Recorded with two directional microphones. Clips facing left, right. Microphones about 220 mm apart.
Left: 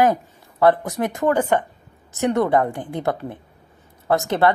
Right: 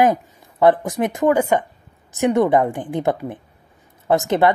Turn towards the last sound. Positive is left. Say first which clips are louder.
# right 2 dB
turn(degrees=-20)  # may be behind; listen again after turning